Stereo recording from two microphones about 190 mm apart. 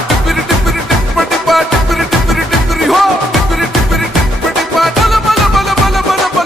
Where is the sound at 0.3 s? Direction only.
Centre (ahead or behind).